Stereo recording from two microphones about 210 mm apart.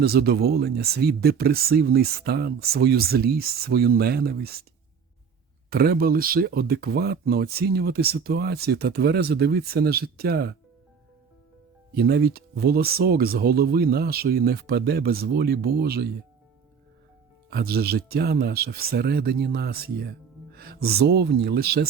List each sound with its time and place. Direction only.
0.0 s speech: 50° right (ahead or behind)
5.7 s speech: 45° right (ahead or behind)
11.9 s speech: 50° right (ahead or behind)
17.5 s speech: 50° right (ahead or behind)